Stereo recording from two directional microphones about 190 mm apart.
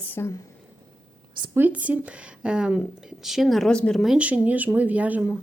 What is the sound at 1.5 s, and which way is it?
Speech, 10° right (ahead or behind).